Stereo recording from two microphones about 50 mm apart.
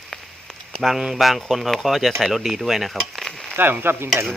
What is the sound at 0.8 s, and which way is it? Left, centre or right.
Speech, centre.